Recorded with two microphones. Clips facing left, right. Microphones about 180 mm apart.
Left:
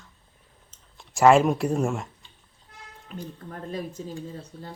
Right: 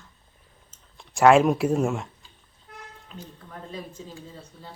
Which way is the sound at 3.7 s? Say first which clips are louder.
Left 6 dB; 45° left (ahead or behind).